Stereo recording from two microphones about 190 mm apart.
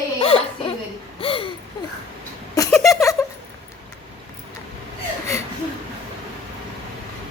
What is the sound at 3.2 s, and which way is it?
Cat, 15° left (ahead or behind).